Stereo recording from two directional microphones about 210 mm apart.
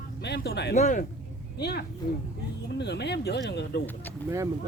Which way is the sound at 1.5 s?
50° left (ahead or behind).